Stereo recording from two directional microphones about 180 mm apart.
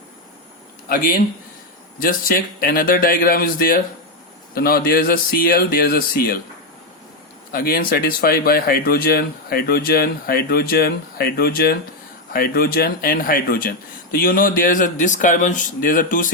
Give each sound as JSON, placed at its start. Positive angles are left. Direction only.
{"t": 0.9, "sound": "a man's voice", "side_deg": 55}
{"t": 7.5, "sound": "a man's voice", "side_deg": 55}